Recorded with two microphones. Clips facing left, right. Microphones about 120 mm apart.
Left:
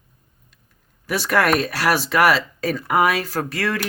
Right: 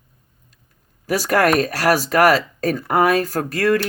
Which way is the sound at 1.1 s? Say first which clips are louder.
Right 2 dB; 40° right (ahead or behind).